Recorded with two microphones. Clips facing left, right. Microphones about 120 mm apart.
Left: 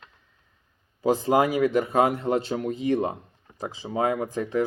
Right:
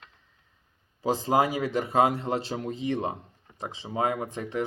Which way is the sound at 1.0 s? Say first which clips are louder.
Left 3 dB; 30° right (ahead or behind).